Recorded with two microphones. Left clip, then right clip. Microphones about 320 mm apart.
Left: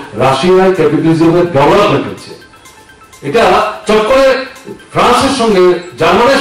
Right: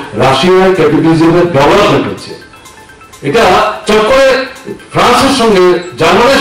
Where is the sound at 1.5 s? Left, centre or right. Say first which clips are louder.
Right 1 dB; right.